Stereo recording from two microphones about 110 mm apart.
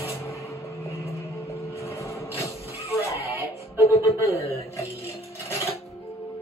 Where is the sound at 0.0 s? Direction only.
25° left (ahead or behind).